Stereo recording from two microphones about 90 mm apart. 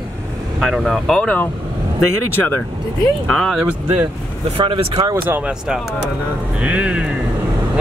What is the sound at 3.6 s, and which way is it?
Speech, 15° right (ahead or behind).